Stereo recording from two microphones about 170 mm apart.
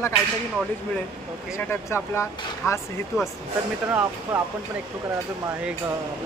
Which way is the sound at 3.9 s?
15° right (ahead or behind).